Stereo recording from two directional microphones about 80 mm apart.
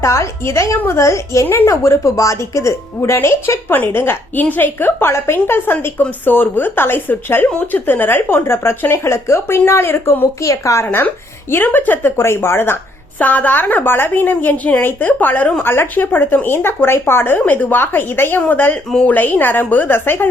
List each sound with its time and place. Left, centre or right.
0.0 s a woman's voice: left
10.4 s a woman's voice: left
10.8 s a woman's voice: left